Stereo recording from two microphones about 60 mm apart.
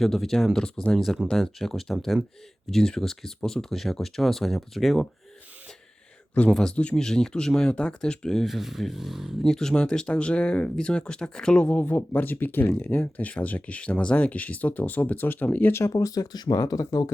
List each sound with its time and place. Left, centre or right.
0.0 s speech: centre
0.9 s speech: centre
6.5 s speech: centre
8.4 s speech: centre
9.4 s speech: centre
11.9 s speech: left
15.9 s speech: left